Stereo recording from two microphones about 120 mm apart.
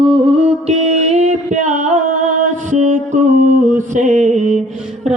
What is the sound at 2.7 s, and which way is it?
Music, 90° right.